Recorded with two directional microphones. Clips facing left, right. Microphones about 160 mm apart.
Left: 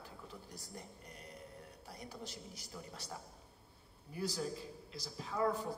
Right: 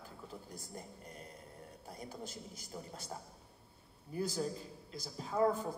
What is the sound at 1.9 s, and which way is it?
Speech, 50° right (ahead or behind).